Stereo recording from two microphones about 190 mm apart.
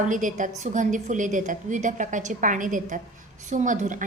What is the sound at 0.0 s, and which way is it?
A woman's voice, 45° right (ahead or behind).